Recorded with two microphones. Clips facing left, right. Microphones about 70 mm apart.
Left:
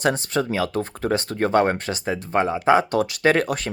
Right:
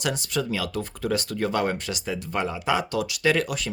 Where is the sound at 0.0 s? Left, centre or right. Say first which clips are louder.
Left 5 dB; left.